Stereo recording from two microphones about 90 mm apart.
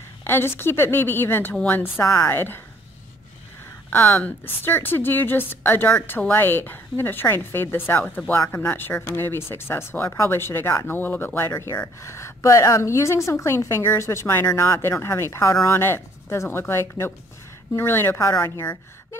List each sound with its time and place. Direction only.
0.3 s speech: 25° left (ahead or behind)
3.9 s a woman's voice: 30° left (ahead or behind)